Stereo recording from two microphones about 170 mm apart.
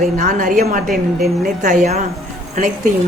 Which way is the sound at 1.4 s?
50° right (ahead or behind).